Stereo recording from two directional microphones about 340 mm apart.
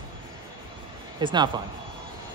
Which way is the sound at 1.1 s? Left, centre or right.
Centre.